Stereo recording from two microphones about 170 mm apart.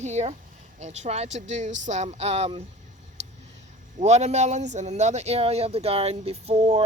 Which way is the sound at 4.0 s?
40° right (ahead or behind).